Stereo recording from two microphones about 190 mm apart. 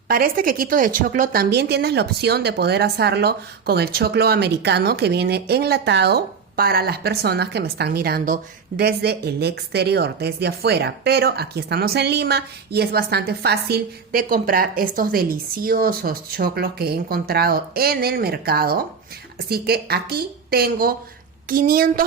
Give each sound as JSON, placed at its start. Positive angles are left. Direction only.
{"t": 0.1, "sound": "a woman's voice", "side_deg": -50}